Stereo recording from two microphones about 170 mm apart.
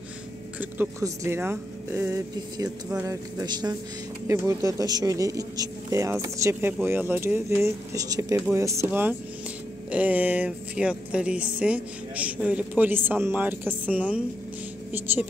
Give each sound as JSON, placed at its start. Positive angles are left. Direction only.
{"t": 0.6, "sound": "speech", "side_deg": -15}